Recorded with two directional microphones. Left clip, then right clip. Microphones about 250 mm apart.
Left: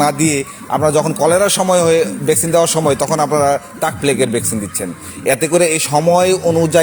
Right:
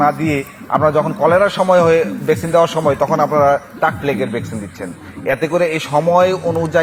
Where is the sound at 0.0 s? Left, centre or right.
Left.